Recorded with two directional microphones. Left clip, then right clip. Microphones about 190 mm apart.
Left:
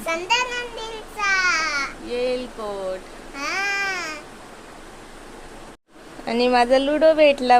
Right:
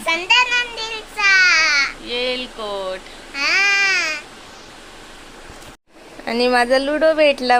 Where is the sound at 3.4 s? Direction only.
15° left (ahead or behind).